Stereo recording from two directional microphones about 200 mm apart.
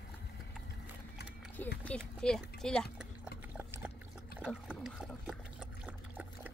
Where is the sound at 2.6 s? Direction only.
5° left (ahead or behind).